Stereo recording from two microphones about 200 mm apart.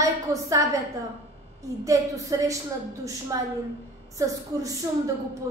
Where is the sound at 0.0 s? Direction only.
15° right (ahead or behind).